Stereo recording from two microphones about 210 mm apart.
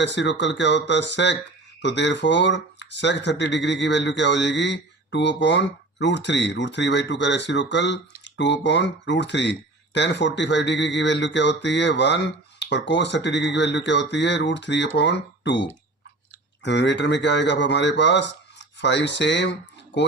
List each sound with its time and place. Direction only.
0.0 s speech: 55° left (ahead or behind)
16.6 s speech: 55° left (ahead or behind)